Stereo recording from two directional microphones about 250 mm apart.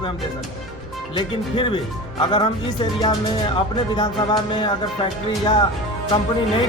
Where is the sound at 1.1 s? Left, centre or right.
Left.